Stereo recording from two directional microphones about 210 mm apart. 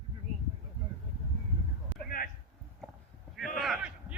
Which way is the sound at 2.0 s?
45° left (ahead or behind).